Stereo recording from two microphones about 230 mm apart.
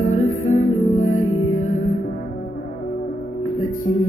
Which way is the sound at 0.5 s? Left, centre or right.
Left.